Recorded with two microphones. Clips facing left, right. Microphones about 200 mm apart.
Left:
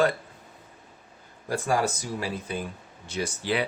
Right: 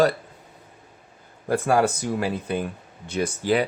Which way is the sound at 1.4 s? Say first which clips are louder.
Right 5 dB; 60° right (ahead or behind).